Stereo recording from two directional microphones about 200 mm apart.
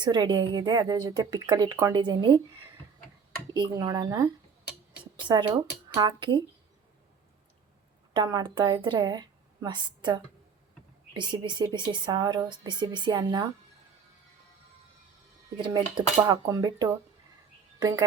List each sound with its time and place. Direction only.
0.0 s speech: 20° right (ahead or behind)
3.5 s speech: 20° right (ahead or behind)
5.9 s speech: 25° right (ahead or behind)
8.1 s a woman's voice: 20° right (ahead or behind)
15.5 s speech: 20° right (ahead or behind)